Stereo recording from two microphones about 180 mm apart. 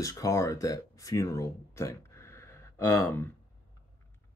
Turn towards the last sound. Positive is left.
turn(degrees=15)  # may be behind; listen again after turning